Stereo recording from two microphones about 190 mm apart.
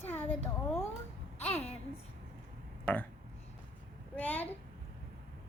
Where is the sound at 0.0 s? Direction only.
10° left (ahead or behind).